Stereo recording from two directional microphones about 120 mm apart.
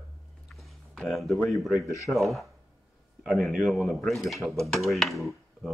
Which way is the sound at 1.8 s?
25° left (ahead or behind).